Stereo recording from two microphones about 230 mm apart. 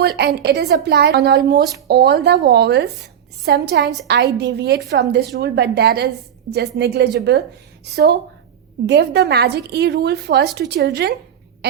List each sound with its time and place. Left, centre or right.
0.0 s a woman's voice: right